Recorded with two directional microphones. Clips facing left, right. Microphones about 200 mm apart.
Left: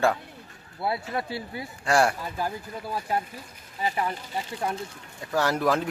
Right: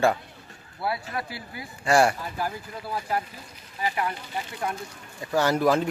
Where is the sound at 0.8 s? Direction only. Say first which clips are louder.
Left 1 dB; 25° left (ahead or behind).